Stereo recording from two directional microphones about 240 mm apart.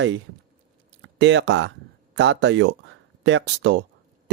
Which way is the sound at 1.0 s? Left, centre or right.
Right.